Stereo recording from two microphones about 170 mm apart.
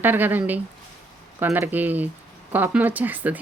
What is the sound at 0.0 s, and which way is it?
Speech, 10° right (ahead or behind).